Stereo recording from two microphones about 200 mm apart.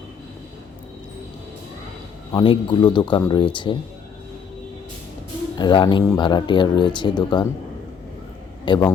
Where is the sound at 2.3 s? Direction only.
25° left (ahead or behind).